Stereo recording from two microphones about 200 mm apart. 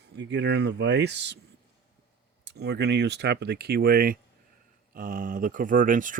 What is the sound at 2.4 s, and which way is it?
A man's voice, 55° right (ahead or behind).